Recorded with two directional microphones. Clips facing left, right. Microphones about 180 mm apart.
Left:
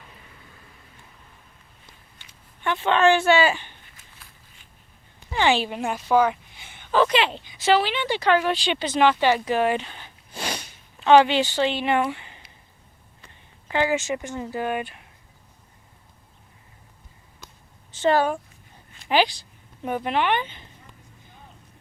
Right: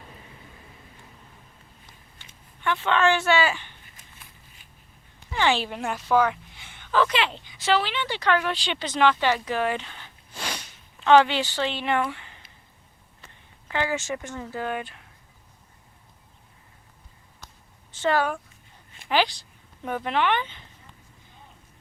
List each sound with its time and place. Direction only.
2.6 s speech: 20° left (ahead or behind)
5.4 s a woman's voice: 15° left (ahead or behind)
13.7 s a woman's voice: 20° left (ahead or behind)
18.0 s speech: 30° left (ahead or behind)
19.0 s a woman's voice: 15° left (ahead or behind)